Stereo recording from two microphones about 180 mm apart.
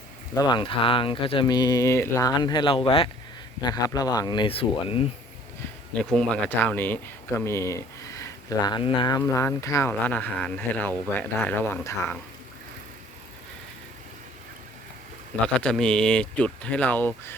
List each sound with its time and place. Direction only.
0.3 s speech: 25° left (ahead or behind)
5.9 s speech: 5° left (ahead or behind)
15.6 s speech: 5° left (ahead or behind)